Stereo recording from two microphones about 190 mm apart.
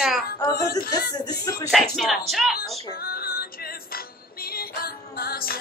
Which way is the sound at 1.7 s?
Centre (ahead or behind).